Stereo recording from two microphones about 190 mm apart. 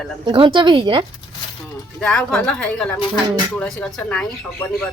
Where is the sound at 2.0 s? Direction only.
5° left (ahead or behind).